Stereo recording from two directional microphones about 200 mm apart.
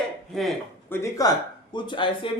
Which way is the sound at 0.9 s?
15° left (ahead or behind).